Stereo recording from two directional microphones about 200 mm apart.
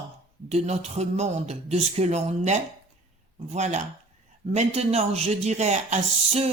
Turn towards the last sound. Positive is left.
turn(degrees=-35)  # may be behind; listen again after turning